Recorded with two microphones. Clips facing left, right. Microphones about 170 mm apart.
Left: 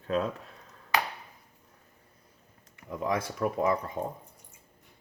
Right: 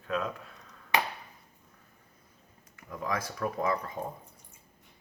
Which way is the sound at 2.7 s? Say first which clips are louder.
Left 4 dB; 25° left (ahead or behind).